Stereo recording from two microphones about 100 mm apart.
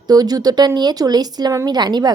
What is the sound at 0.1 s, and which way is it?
Speech, 40° right (ahead or behind).